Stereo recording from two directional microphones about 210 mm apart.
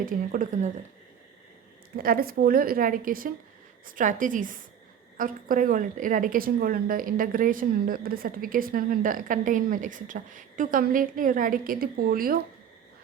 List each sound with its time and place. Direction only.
0.0 s a woman's voice: 40° right (ahead or behind)
2.0 s a woman's voice: 45° right (ahead or behind)